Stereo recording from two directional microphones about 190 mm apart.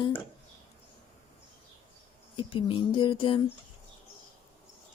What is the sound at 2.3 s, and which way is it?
Speech, 30° left (ahead or behind).